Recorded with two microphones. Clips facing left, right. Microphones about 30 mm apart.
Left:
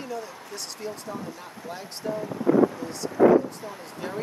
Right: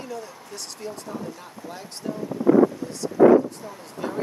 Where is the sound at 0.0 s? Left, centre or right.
Centre.